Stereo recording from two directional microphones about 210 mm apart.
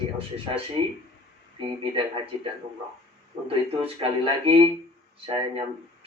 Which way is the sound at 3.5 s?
25° right (ahead or behind).